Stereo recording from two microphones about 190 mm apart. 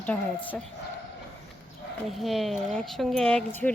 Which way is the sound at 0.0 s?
10° left (ahead or behind).